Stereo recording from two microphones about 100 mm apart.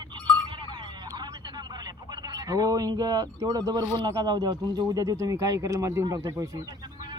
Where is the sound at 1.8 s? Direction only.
40° right (ahead or behind).